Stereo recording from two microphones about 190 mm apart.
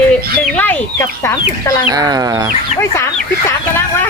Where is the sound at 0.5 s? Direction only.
10° left (ahead or behind).